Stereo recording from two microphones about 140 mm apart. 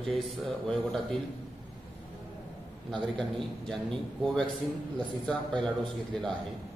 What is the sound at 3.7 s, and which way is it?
A man's voice, 5° left (ahead or behind).